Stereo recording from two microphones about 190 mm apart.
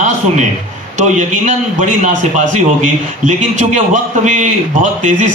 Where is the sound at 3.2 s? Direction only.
40° right (ahead or behind).